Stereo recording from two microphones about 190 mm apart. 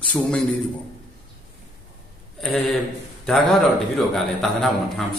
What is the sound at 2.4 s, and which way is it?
Speech, centre (ahead or behind).